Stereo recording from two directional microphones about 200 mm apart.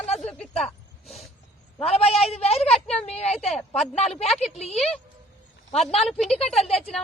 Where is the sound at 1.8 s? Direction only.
30° left (ahead or behind).